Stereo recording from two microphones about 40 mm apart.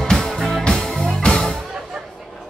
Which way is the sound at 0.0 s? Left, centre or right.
Centre.